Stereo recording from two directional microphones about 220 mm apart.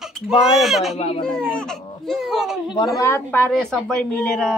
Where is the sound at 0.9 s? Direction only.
25° left (ahead or behind).